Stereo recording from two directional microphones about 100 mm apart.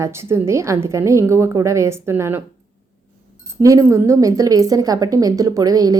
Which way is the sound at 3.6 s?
30° right (ahead or behind).